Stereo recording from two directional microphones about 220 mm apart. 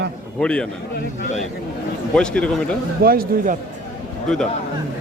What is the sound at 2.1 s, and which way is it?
Speech, 5° left (ahead or behind).